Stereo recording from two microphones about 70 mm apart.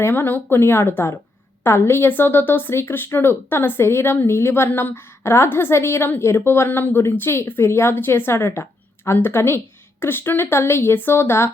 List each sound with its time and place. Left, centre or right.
0.0 s a woman's voice: left